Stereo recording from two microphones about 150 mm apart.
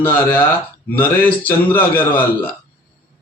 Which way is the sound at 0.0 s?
15° left (ahead or behind).